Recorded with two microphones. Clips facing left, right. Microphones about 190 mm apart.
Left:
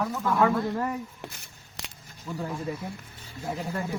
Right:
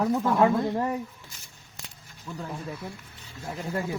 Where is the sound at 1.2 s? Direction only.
60° left (ahead or behind).